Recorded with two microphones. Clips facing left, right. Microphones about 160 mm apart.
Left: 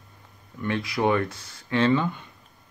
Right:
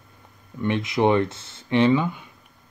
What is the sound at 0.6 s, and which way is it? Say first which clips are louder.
Speech: right 4 dB; 20° right (ahead or behind).